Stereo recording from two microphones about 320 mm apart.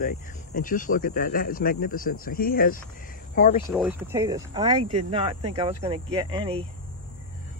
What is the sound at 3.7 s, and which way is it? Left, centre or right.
Speech, centre.